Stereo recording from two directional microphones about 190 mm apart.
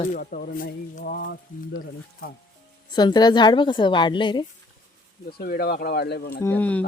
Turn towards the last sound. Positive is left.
turn(degrees=10)  # may be behind; listen again after turning